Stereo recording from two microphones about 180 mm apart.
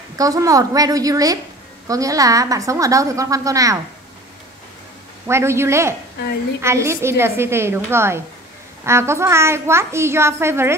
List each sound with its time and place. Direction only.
0.2 s a woman's voice: 20° right (ahead or behind)
5.2 s a child's voice: 15° right (ahead or behind)